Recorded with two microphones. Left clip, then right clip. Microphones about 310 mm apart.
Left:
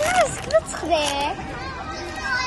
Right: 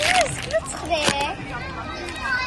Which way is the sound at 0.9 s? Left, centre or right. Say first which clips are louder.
Left 1 dB; left.